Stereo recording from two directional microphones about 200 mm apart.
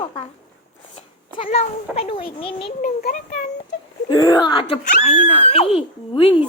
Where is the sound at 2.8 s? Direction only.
40° left (ahead or behind).